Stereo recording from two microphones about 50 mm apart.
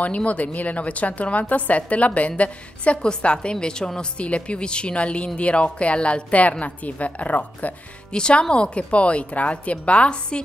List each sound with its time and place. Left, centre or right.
0.0 s a woman's voice: left
8.1 s a woman's voice: centre